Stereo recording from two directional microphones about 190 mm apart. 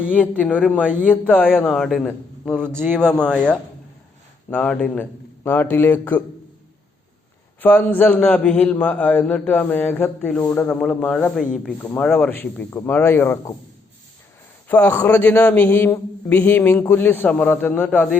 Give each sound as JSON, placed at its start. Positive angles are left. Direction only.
{"t": 0.1, "sound": "a man's voice", "side_deg": 10}
{"t": 0.6, "sound": "a man's voice", "side_deg": -5}
{"t": 1.0, "sound": "a man's voice", "side_deg": 10}
{"t": 7.6, "sound": "a man's voice", "side_deg": 10}
{"t": 14.7, "sound": "a man's voice", "side_deg": 10}